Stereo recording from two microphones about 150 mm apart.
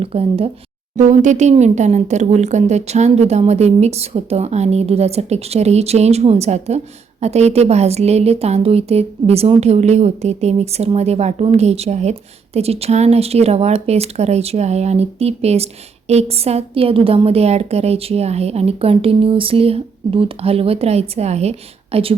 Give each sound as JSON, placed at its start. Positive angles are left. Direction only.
{"t": 0.0, "sound": "speech", "side_deg": -40}
{"t": 0.9, "sound": "speech", "side_deg": -55}